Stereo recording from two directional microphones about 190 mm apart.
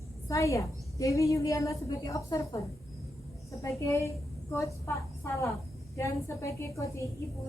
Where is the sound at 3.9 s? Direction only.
15° left (ahead or behind).